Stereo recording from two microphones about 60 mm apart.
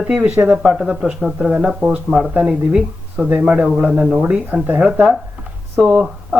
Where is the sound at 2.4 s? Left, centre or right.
Centre.